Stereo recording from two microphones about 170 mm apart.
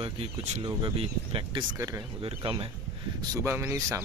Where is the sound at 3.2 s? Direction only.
20° right (ahead or behind).